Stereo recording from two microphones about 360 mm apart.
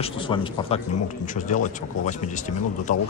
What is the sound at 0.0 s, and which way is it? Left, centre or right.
Speech, centre.